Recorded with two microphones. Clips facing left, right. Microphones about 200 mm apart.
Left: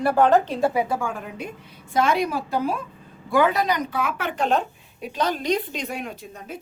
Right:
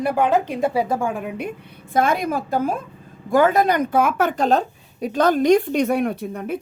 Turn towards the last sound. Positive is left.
turn(degrees=-60)  # may be behind; listen again after turning